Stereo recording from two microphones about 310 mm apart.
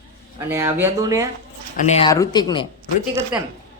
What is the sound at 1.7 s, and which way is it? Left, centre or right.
Speech, left.